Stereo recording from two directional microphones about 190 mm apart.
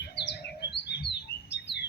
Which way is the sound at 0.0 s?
60° left (ahead or behind).